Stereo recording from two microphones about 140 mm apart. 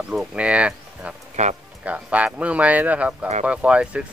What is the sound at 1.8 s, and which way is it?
Speech, 10° right (ahead or behind).